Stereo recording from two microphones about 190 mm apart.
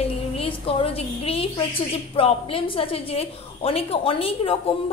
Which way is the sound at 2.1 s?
30° left (ahead or behind).